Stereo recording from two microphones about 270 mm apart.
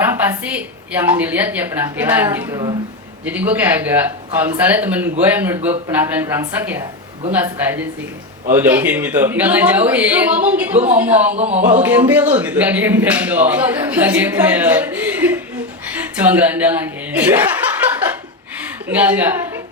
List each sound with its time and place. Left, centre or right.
0.0 s speech: centre
18.9 s speech: centre